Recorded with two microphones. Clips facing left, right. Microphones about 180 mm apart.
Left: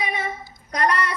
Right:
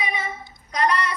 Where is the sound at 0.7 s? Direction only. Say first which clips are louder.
Even; 55° left (ahead or behind).